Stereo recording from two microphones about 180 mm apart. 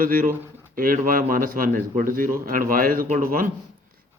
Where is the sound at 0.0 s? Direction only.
55° right (ahead or behind).